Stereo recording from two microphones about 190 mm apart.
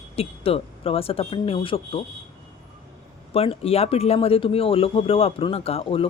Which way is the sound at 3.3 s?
30° left (ahead or behind).